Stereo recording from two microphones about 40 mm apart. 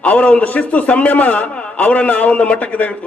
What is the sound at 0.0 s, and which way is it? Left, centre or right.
A man's voice, left.